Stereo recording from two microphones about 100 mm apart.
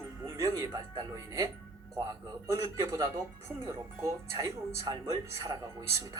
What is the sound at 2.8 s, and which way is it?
Speech, 30° right (ahead or behind).